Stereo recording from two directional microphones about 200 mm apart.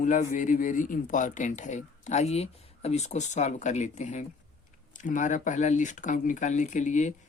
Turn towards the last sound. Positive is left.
turn(degrees=35)  # may be behind; listen again after turning